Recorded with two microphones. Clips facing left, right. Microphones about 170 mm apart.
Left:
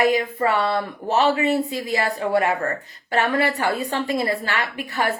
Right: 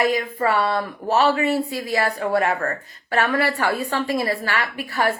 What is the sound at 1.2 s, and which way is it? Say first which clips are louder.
Speech: left 1 dB; 20° left (ahead or behind).